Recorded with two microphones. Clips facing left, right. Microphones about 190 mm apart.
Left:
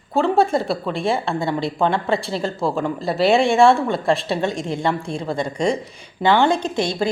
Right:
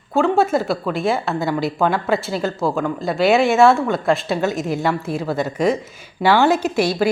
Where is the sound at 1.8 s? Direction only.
30° left (ahead or behind).